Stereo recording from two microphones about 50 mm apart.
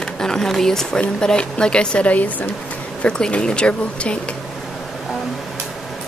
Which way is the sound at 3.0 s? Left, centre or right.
Left.